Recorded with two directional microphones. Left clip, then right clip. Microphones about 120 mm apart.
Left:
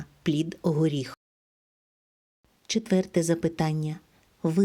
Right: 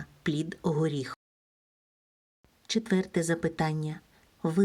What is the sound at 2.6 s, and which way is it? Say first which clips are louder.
Speech: left 3 dB; 30° left (ahead or behind).